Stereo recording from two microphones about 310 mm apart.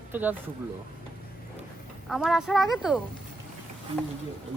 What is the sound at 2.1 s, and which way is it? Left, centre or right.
Speech, centre.